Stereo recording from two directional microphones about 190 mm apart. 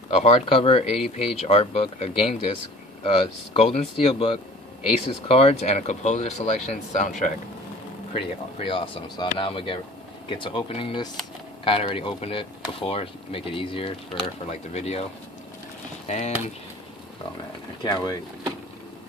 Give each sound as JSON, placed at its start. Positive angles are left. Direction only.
{"t": 0.1, "sound": "speech", "side_deg": 35}
{"t": 8.1, "sound": "speech", "side_deg": 30}
{"t": 16.1, "sound": "speech", "side_deg": 35}
{"t": 17.8, "sound": "speech", "side_deg": 20}